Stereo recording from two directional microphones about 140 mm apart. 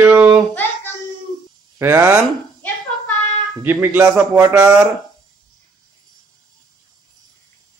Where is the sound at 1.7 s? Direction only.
20° right (ahead or behind).